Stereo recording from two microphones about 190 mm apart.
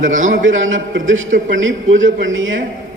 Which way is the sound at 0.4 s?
90° right.